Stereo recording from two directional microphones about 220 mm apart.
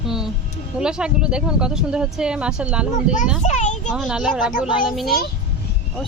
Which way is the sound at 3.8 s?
Centre (ahead or behind).